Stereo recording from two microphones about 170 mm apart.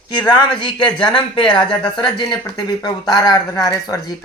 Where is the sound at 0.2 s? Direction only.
25° left (ahead or behind).